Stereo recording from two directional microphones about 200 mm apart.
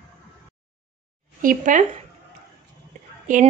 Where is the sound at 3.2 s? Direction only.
40° right (ahead or behind).